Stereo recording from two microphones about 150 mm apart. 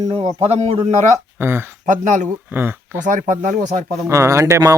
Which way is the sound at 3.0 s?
60° right (ahead or behind).